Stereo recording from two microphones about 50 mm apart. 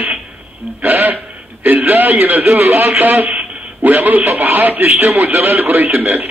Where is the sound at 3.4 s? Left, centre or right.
Right.